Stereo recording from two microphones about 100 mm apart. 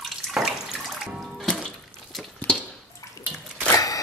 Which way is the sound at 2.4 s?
20° left (ahead or behind).